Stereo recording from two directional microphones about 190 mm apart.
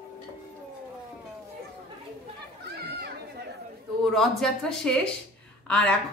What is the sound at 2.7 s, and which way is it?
Chatter, 55° right (ahead or behind).